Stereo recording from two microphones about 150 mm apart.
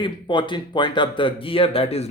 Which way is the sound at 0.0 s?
35° left (ahead or behind).